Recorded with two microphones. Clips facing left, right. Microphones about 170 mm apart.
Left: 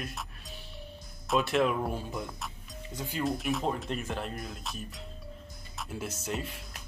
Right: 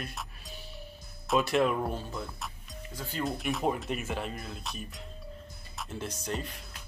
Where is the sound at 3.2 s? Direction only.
Centre (ahead or behind).